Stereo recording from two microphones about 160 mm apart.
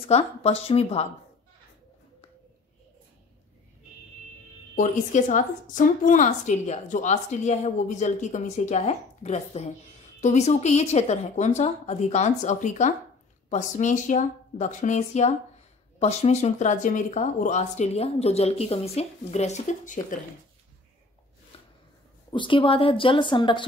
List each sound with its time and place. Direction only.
0.1 s a woman's voice: 40° left (ahead or behind)
4.7 s a woman's voice: 50° left (ahead or behind)
22.3 s a woman's voice: 30° left (ahead or behind)